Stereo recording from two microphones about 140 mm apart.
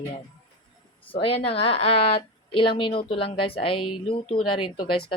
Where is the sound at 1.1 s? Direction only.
40° left (ahead or behind).